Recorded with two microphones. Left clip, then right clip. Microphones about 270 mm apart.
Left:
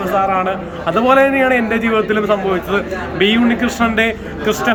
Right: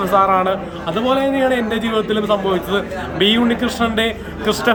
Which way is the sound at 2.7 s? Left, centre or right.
Centre.